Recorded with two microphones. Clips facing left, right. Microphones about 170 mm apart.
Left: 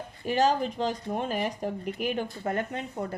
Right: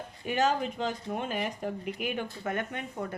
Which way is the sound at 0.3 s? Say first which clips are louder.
Left 3 dB; 35° left (ahead or behind).